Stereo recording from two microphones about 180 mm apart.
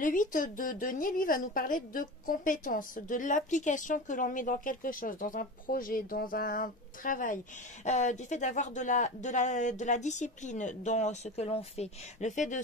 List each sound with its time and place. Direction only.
0.0 s a woman's voice: 50° left (ahead or behind)